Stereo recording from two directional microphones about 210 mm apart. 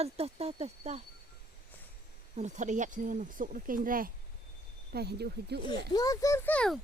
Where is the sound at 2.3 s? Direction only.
35° right (ahead or behind); by 5.6 s 50° right (ahead or behind).